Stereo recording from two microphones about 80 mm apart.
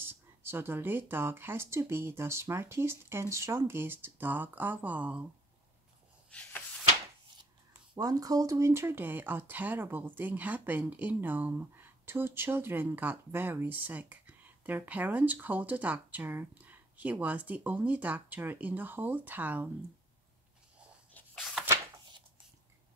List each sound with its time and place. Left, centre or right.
0.0 s speech: right
8.0 s speech: right
8.6 s speech: right